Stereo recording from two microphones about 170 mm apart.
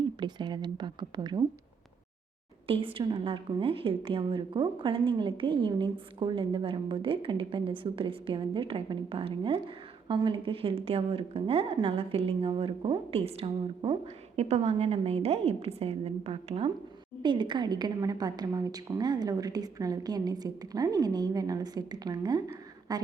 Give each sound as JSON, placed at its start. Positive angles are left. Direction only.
{"t": 0.2, "sound": "a woman's voice", "side_deg": -25}
{"t": 2.6, "sound": "a woman's voice", "side_deg": -30}